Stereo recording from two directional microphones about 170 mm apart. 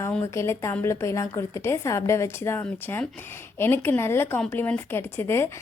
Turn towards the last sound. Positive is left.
turn(degrees=15)  # may be behind; listen again after turning